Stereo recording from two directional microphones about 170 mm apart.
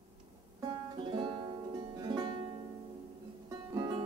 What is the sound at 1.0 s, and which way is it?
Music, 30° right (ahead or behind).